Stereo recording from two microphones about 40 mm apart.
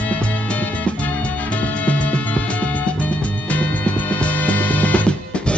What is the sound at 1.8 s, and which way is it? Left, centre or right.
Music, left.